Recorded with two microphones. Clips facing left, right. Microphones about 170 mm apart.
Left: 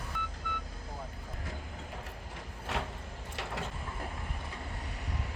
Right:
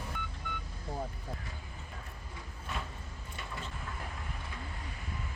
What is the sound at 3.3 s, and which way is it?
Mechanisms, 75° left (ahead or behind).